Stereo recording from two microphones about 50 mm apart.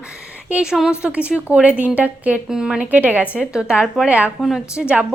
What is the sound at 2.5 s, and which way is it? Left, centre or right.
Speech, centre.